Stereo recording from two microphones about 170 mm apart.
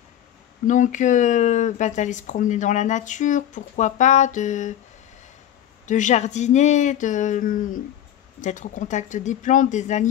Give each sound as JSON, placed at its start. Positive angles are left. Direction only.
{"t": 0.7, "sound": "speech", "side_deg": 45}
{"t": 5.9, "sound": "speech", "side_deg": 45}